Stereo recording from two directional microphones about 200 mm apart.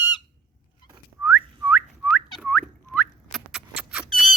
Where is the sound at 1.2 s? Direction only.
Centre (ahead or behind).